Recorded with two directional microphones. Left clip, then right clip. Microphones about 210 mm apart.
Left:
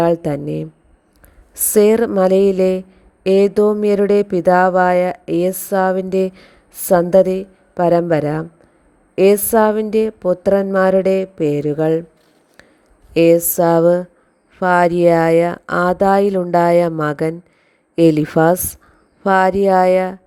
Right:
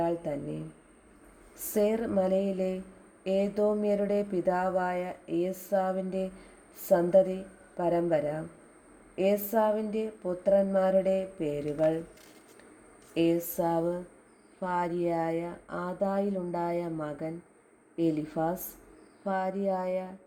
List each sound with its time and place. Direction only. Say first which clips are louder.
0.0 s speech: left 15 dB; 45° left (ahead or behind)
13.1 s speech: left 16 dB; 45° left (ahead or behind)